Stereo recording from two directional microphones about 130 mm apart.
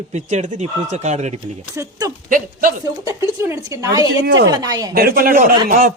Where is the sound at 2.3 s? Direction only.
90° right.